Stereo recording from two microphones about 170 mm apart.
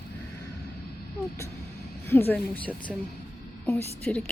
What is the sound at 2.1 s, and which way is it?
A woman's voice, 10° left (ahead or behind).